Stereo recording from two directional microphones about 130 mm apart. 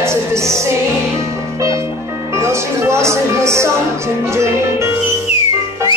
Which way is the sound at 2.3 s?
20° right (ahead or behind).